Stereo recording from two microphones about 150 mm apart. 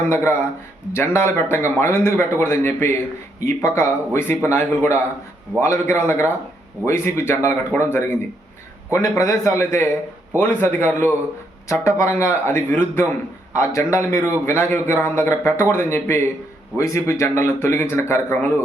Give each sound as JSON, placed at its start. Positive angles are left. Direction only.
{"t": 0.1, "sound": "a man's voice", "side_deg": 15}